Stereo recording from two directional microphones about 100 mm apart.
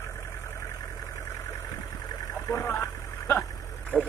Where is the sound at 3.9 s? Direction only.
15° left (ahead or behind).